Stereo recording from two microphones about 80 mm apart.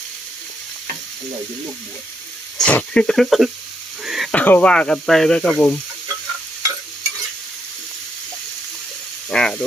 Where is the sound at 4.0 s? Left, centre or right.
Centre.